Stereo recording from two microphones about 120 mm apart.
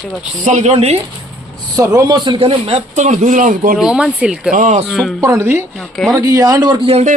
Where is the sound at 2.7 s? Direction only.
70° right (ahead or behind); by 3.5 s 90° right.